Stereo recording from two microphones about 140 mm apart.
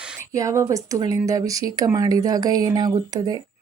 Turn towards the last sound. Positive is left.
turn(degrees=-30)  # may be behind; listen again after turning